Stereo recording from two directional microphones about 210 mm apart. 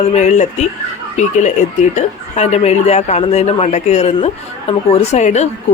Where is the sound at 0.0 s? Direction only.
30° left (ahead or behind).